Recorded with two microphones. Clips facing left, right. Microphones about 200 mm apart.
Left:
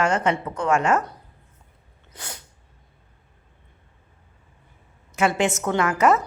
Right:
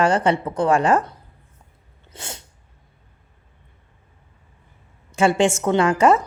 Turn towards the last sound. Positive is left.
turn(degrees=-30)  # may be behind; listen again after turning